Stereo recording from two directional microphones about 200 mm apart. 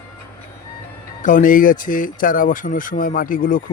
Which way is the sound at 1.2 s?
40° left (ahead or behind).